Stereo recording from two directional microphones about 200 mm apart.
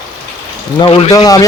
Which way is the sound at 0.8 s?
30° left (ahead or behind).